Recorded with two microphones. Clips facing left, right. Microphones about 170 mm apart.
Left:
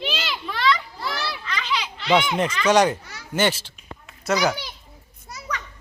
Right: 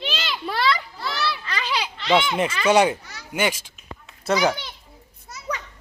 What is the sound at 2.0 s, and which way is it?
Speech, 10° left (ahead or behind).